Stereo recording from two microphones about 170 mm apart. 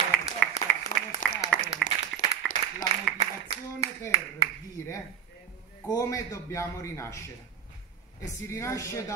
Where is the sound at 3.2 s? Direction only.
35° right (ahead or behind).